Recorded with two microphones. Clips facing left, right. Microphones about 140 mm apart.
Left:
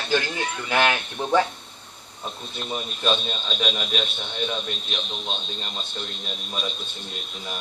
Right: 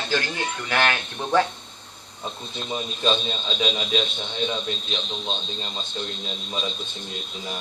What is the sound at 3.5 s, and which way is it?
Speech, 20° right (ahead or behind).